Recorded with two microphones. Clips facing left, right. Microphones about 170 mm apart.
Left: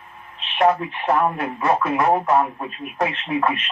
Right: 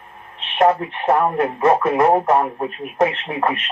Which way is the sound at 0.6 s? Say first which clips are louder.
Right 2 dB; 45° right (ahead or behind).